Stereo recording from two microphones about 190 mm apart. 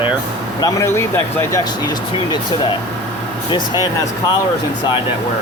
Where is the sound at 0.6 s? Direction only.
15° left (ahead or behind).